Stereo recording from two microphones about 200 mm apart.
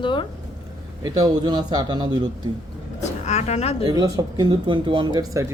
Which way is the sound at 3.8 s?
20° right (ahead or behind).